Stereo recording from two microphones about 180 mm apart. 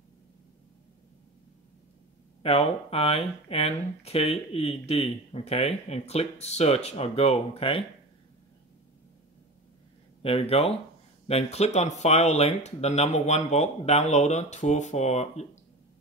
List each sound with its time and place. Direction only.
2.4 s speech: 30° left (ahead or behind)
10.2 s speech: 35° left (ahead or behind)